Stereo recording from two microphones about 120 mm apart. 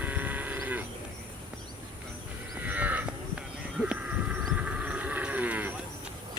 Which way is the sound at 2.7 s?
15° right (ahead or behind).